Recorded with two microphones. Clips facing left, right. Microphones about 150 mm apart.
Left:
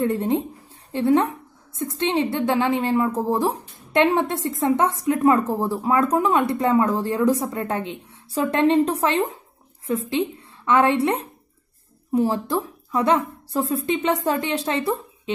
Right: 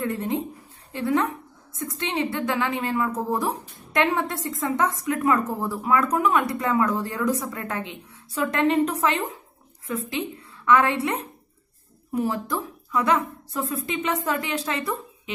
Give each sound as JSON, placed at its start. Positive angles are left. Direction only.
{"t": 0.0, "sound": "a woman's voice", "side_deg": 30}
{"t": 10.6, "sound": "a woman's voice", "side_deg": 25}